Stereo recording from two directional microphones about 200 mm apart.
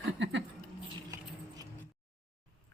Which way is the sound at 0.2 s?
65° right (ahead or behind).